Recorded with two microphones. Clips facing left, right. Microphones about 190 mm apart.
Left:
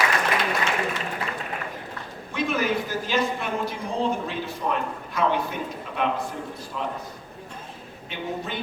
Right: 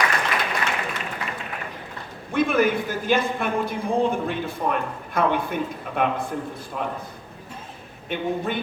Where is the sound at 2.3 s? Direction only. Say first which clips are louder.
Right 5 dB; 55° right (ahead or behind).